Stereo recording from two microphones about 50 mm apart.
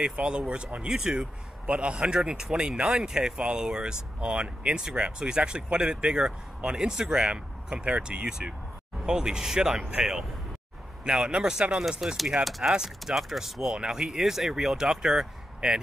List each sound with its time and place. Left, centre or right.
0.0 s speech: centre